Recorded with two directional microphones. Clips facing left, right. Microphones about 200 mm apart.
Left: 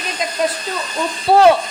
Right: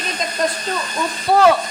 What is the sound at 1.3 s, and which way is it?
Speech, 30° left (ahead or behind).